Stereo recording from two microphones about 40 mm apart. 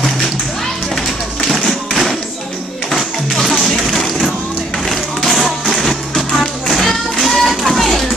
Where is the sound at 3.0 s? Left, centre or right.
Centre.